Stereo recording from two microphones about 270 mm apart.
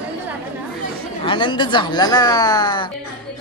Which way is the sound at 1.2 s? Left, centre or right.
Centre.